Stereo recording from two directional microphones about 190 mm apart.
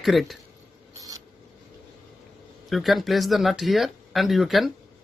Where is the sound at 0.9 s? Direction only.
20° right (ahead or behind).